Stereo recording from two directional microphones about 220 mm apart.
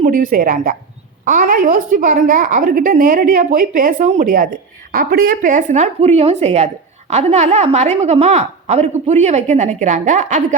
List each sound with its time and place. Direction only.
0.0 s a woman's voice: 35° right (ahead or behind)